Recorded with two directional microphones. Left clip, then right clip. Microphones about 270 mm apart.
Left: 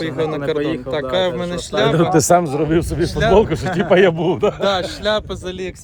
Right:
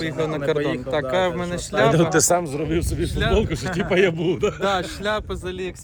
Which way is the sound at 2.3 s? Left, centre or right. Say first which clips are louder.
Left 7 dB; left.